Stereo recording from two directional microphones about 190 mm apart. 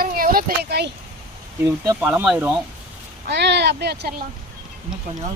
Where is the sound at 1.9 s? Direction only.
10° right (ahead or behind).